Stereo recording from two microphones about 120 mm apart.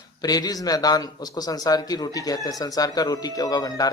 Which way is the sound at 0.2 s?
30° left (ahead or behind).